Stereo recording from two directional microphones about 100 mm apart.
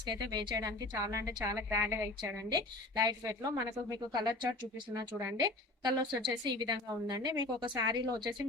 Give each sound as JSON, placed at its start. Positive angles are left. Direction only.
{"t": 0.0, "sound": "a woman's voice", "side_deg": -45}
{"t": 2.5, "sound": "a woman's voice", "side_deg": -45}
{"t": 6.2, "sound": "a woman's voice", "side_deg": -50}